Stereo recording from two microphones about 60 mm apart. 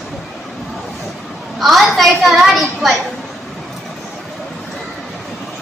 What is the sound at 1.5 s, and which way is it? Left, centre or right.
A woman's voice, centre.